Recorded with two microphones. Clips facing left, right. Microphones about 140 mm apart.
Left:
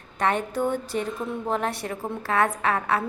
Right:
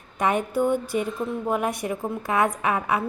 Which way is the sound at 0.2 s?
10° right (ahead or behind).